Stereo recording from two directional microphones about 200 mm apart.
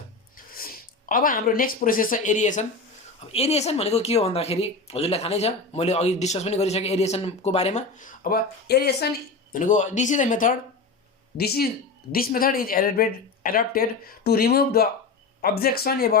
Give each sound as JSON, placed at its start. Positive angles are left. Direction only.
{"t": 0.3, "sound": "speech", "side_deg": 45}
{"t": 9.5, "sound": "speech", "side_deg": 40}